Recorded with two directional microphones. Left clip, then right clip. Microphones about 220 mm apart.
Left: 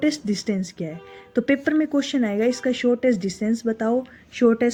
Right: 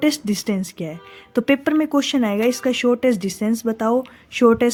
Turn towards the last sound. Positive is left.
turn(degrees=-40)  # may be behind; listen again after turning